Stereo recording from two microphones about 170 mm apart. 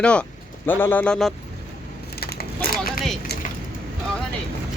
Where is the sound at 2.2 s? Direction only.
65° left (ahead or behind).